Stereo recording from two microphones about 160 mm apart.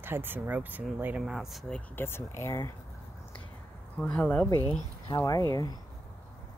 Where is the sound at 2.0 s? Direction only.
15° left (ahead or behind).